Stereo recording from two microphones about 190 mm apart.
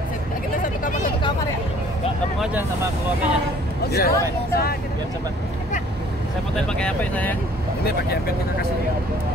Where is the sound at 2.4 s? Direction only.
10° right (ahead or behind).